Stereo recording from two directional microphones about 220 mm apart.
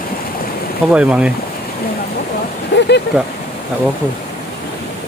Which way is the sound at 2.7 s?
50° left (ahead or behind).